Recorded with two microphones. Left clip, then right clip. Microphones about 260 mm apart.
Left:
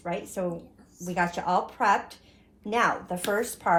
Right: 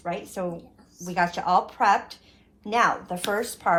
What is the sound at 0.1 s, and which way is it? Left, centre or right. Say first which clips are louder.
A woman's voice: right 1 dB; centre.